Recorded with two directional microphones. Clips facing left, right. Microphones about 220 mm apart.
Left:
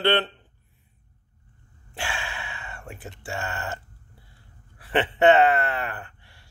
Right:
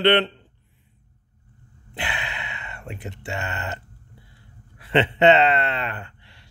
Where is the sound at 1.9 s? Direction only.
20° right (ahead or behind).